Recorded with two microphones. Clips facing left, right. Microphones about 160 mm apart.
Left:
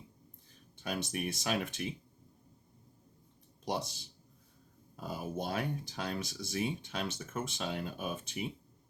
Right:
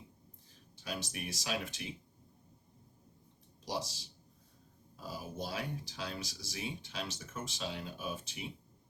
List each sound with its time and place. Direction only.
0.8 s speech: 55° left (ahead or behind)
3.7 s speech: 55° left (ahead or behind)